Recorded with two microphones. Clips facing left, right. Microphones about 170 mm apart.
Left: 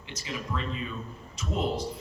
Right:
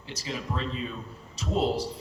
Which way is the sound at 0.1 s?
35° right (ahead or behind).